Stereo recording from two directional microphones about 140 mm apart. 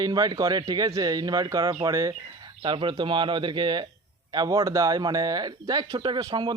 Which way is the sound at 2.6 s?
35° right (ahead or behind).